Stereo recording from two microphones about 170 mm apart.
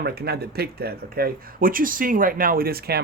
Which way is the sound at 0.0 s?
70° right (ahead or behind).